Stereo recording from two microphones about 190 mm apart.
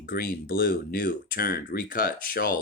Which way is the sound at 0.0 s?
50° left (ahead or behind).